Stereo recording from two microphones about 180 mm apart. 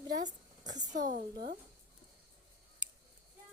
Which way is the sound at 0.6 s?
20° right (ahead or behind).